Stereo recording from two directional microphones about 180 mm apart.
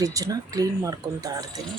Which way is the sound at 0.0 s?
20° right (ahead or behind).